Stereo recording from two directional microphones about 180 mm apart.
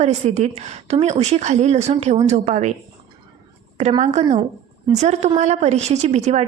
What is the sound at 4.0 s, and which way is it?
A woman's voice, 40° right (ahead or behind).